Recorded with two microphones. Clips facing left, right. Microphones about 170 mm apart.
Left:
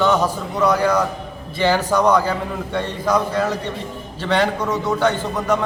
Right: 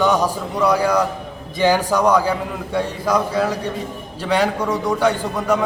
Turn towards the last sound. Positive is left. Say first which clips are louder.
# right 1 dB
turn(degrees=-10)  # may be behind; listen again after turning